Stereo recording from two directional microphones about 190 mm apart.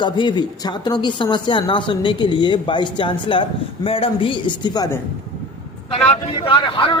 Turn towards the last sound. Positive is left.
turn(degrees=25)  # may be behind; listen again after turning